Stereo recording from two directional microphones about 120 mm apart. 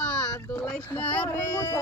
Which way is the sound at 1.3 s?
20° left (ahead or behind).